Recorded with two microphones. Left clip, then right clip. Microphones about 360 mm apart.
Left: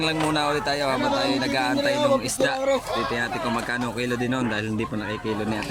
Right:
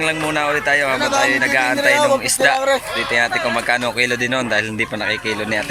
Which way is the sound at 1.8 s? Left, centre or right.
Right.